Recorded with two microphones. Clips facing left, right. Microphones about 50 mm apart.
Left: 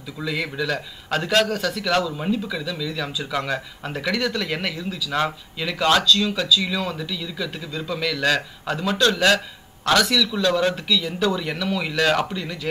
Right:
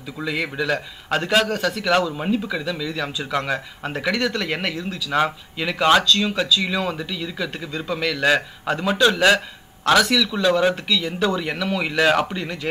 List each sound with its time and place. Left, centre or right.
0.2 s speech: centre